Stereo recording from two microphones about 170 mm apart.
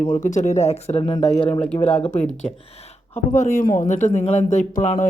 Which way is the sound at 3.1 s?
50° left (ahead or behind).